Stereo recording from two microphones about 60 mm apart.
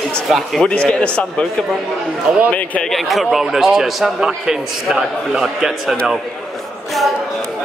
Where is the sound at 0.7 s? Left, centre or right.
Centre.